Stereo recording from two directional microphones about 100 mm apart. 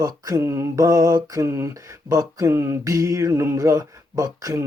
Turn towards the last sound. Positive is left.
turn(degrees=-35)  # may be behind; listen again after turning